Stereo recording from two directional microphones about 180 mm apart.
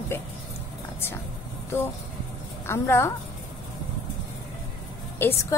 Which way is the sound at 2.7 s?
15° left (ahead or behind).